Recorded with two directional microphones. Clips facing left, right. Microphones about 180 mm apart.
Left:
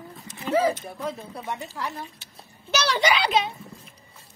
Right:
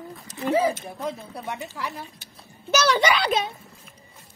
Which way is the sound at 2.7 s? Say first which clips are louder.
Right 2 dB; 50° right (ahead or behind).